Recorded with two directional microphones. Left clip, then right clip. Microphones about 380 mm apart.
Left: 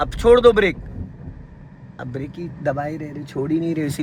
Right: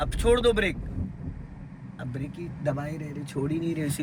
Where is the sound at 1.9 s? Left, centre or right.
Centre.